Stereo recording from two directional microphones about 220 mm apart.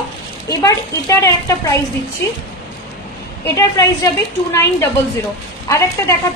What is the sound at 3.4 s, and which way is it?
Speech, 15° left (ahead or behind).